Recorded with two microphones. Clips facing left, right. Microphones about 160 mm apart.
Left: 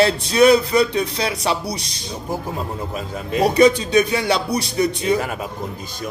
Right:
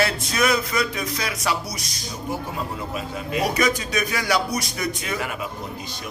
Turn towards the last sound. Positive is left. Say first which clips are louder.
# left 8 dB
turn(degrees=35)  # may be behind; listen again after turning